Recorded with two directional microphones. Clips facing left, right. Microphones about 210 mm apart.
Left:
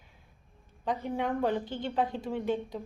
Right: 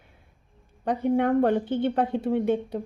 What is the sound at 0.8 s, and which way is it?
A woman's voice, 55° right (ahead or behind).